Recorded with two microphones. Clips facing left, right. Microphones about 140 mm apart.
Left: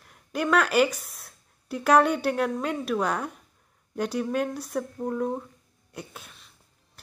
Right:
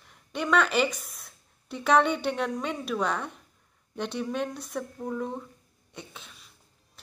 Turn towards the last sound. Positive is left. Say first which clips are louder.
# left 3 dB
turn(degrees=5)  # may be behind; listen again after turning